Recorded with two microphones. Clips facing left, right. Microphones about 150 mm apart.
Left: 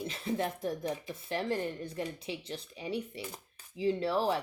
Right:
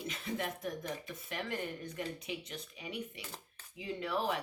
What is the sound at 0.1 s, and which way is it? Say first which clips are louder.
Speech: left 5 dB; 35° left (ahead or behind).